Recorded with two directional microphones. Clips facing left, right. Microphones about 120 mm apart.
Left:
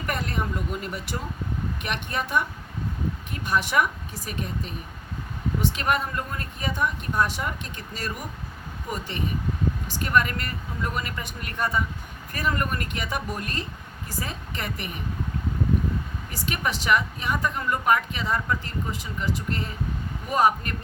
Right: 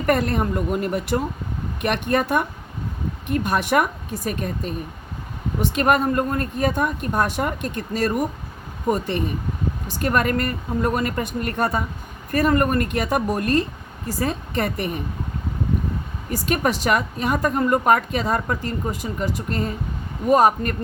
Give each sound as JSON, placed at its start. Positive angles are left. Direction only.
{"t": 0.0, "sound": "a woman's voice", "side_deg": -55}
{"t": 16.3, "sound": "a woman's voice", "side_deg": -45}